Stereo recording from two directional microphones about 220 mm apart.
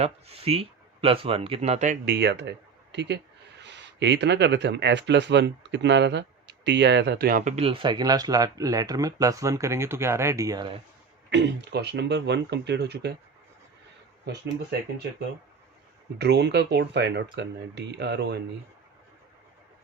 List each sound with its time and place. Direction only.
0.0 s speech: 25° right (ahead or behind)
2.1 s speech: 50° right (ahead or behind); by 10.7 s 15° right (ahead or behind)
11.3 s speech: 50° right (ahead or behind)
14.3 s speech: 50° right (ahead or behind)
16.1 s speech: 50° right (ahead or behind)